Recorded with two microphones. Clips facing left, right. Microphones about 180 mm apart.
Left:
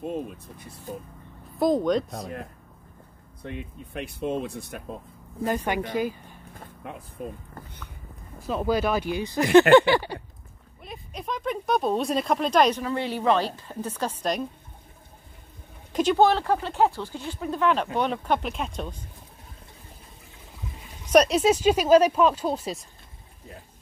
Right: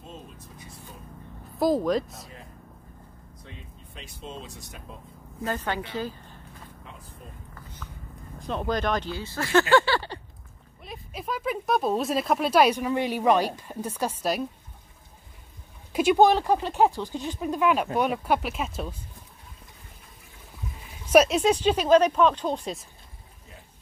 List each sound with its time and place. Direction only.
0.0 s speech: 60° left (ahead or behind)
1.6 s speech: centre (ahead or behind)
3.4 s speech: 60° left (ahead or behind)
5.4 s speech: 15° left (ahead or behind)
6.6 s vehicle: 60° left (ahead or behind)
7.2 s speech: 60° left (ahead or behind)
8.4 s speech: 5° left (ahead or behind)
10.8 s speech: centre (ahead or behind)
15.9 s speech: 10° right (ahead or behind)
21.1 s speech: 5° right (ahead or behind)